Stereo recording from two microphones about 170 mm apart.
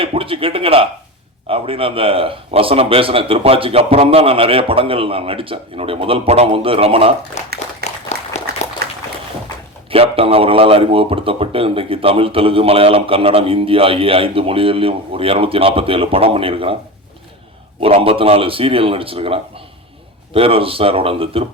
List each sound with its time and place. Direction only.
0.0 s a man's voice: 30° right (ahead or behind)
7.4 s a sound: 40° left (ahead or behind)
9.9 s a man's voice: 35° right (ahead or behind)
17.7 s a man's voice: 35° right (ahead or behind)